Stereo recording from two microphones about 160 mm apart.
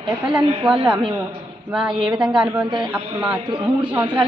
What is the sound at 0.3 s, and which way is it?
Speech, 30° right (ahead or behind).